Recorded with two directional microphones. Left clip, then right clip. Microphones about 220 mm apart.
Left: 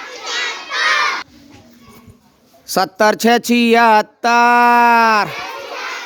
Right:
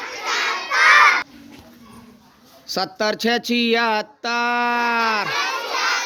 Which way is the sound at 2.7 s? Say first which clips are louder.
Left 8 dB; 35° left (ahead or behind).